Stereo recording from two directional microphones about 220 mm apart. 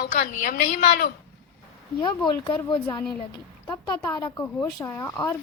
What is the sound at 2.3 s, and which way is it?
Speech, 20° left (ahead or behind).